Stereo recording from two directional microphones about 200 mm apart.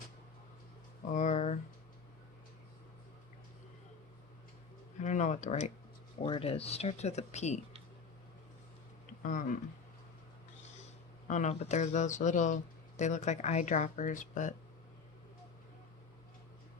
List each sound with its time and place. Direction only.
1.1 s a sound: 35° left (ahead or behind)
4.9 s speech: 35° left (ahead or behind)
9.2 s speech: 40° left (ahead or behind)
11.3 s speech: 35° left (ahead or behind)